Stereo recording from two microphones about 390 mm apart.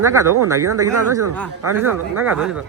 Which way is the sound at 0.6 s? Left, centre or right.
Right.